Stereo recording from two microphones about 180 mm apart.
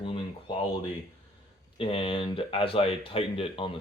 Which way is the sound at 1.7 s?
30° left (ahead or behind).